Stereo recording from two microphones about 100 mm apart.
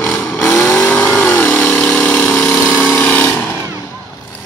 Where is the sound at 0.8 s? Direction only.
20° left (ahead or behind).